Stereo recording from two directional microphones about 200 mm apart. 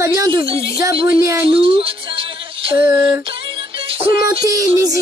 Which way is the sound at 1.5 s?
25° right (ahead or behind).